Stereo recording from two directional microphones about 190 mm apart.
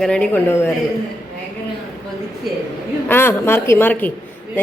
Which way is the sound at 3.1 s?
10° left (ahead or behind).